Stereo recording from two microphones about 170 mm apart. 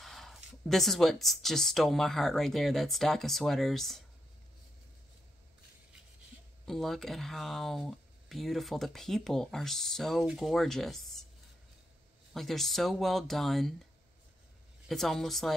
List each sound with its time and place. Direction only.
0.0 s speech: centre (ahead or behind)
6.6 s speech: centre (ahead or behind)
12.4 s speech: centre (ahead or behind)
14.9 s speech: centre (ahead or behind)